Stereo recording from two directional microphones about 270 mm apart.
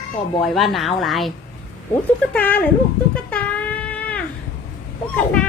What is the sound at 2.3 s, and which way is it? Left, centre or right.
Speech, centre.